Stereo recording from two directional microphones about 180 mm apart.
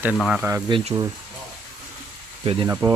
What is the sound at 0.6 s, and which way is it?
Speech, 25° right (ahead or behind).